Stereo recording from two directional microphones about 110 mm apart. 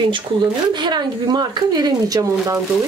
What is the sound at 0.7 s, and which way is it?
Speech, 40° right (ahead or behind).